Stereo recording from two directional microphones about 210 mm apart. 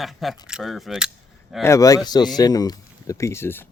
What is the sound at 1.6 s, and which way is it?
Speech, 15° left (ahead or behind).